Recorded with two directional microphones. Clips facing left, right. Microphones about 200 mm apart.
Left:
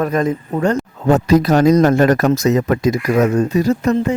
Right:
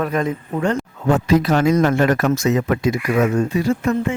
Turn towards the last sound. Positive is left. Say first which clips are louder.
# left 3 dB
turn(degrees=40)  # may be behind; listen again after turning